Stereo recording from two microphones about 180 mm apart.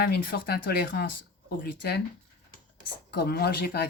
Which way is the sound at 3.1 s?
65° left (ahead or behind).